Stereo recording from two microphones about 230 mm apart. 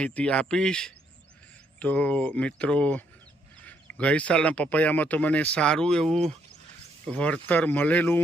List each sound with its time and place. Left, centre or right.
0.0 s speech: centre